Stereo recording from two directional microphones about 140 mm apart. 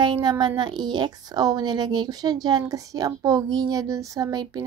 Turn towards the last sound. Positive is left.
turn(degrees=-25)  # may be behind; listen again after turning